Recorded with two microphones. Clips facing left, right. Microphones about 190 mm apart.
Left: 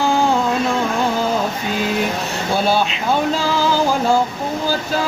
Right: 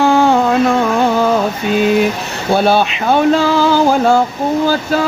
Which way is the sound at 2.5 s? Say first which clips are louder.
Right 6 dB; 60° right (ahead or behind).